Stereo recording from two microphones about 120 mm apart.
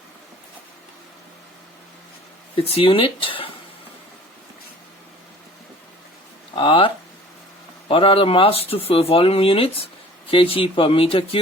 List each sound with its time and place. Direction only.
2.6 s speech: 50° left (ahead or behind)
6.6 s speech: 45° left (ahead or behind)